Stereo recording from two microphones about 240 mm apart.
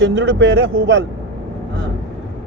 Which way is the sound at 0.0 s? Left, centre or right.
Right.